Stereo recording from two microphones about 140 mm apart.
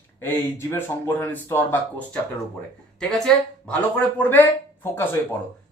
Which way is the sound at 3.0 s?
5° left (ahead or behind).